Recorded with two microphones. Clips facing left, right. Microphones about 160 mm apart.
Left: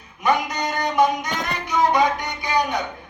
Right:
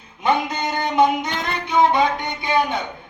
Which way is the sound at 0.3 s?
25° right (ahead or behind).